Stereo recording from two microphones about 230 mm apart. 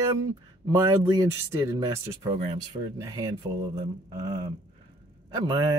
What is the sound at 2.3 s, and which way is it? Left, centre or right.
Speech, right.